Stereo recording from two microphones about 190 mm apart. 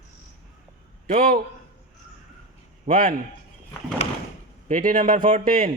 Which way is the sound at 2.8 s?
45° right (ahead or behind).